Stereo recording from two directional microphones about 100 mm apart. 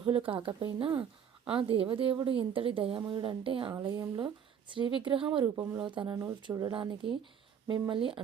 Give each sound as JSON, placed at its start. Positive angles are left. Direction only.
{"t": 0.0, "sound": "a woman's voice", "side_deg": -60}
{"t": 3.9, "sound": "speech", "side_deg": -40}
{"t": 4.7, "sound": "a woman's voice", "side_deg": -55}
{"t": 5.5, "sound": "speech", "side_deg": -40}
{"t": 5.8, "sound": "a woman's voice", "side_deg": -55}